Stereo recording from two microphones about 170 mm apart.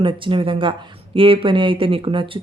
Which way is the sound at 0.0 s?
30° right (ahead or behind).